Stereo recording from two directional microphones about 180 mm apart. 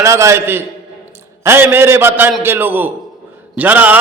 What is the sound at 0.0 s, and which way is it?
A man's voice, 15° right (ahead or behind).